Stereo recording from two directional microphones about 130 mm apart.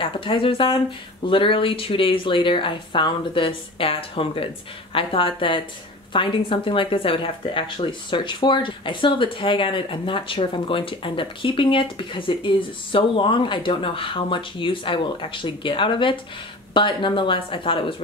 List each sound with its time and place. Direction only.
0.0 s speech: 40° left (ahead or behind)